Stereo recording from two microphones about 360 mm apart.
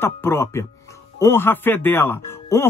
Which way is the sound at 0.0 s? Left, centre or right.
Centre.